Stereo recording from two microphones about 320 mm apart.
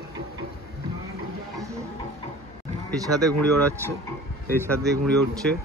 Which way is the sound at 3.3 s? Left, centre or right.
Right.